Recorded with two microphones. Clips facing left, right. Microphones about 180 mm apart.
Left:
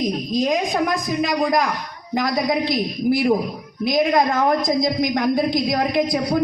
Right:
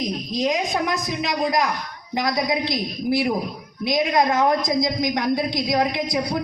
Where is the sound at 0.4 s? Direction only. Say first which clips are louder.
Even; 50° left (ahead or behind).